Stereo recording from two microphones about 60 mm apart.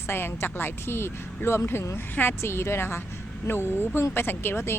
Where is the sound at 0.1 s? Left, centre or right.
Left.